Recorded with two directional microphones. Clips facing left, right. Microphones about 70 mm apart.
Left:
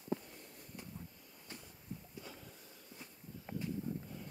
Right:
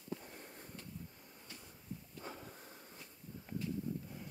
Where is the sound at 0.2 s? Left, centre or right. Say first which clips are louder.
Right 3 dB; right.